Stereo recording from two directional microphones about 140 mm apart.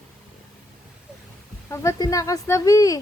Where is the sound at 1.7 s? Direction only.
20° left (ahead or behind).